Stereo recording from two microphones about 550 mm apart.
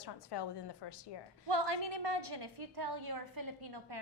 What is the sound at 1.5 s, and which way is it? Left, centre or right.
A woman's voice, right.